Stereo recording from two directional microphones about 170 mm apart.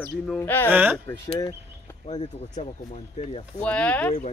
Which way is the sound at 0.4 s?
15° left (ahead or behind).